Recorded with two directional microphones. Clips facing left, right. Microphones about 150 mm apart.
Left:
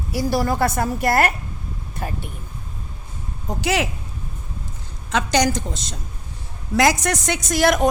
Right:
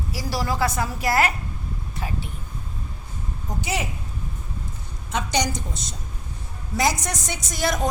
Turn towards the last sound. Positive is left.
turn(degrees=85)